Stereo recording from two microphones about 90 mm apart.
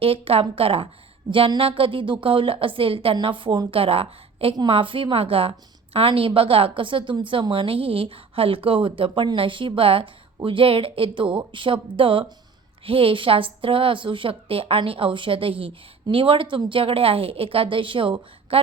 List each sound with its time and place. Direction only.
0.0 s a woman's voice: 90° right; by 3.6 s 70° right (ahead or behind)
3.7 s a woman's voice: 90° right
6.7 s a woman's voice: 75° right (ahead or behind)
7.5 s speech: 85° right
12.8 s speech: 90° right; by 18.6 s 70° right (ahead or behind)